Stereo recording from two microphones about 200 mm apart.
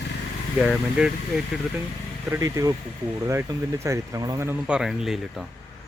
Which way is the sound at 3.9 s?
15° right (ahead or behind).